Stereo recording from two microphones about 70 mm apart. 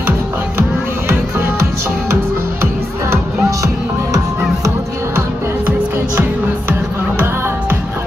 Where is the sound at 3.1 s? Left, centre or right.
Right.